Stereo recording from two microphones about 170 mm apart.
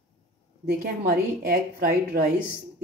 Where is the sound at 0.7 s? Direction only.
55° right (ahead or behind).